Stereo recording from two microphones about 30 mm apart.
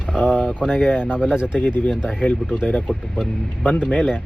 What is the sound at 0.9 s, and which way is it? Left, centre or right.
Speech, left.